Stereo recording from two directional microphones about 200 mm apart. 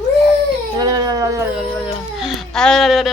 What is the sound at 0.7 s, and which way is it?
Dog, 20° right (ahead or behind).